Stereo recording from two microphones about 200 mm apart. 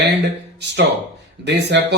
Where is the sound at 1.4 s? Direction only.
60° right (ahead or behind).